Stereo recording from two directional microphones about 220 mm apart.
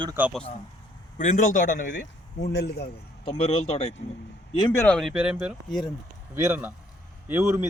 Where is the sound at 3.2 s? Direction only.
25° left (ahead or behind).